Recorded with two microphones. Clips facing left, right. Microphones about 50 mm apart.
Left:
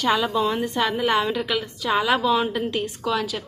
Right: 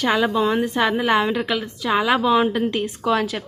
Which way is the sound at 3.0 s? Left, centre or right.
Right.